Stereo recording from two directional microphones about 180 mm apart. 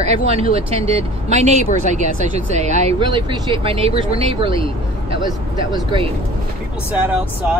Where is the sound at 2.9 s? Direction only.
25° right (ahead or behind).